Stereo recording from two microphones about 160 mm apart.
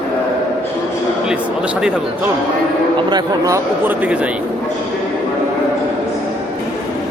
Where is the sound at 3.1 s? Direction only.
20° right (ahead or behind).